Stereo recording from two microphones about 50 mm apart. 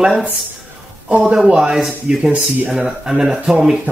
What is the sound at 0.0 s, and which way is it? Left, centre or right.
A man's voice, centre.